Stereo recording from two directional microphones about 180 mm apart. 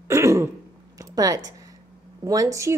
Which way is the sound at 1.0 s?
20° right (ahead or behind).